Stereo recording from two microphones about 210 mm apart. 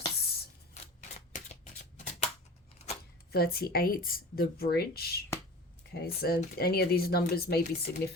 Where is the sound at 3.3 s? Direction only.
45° left (ahead or behind).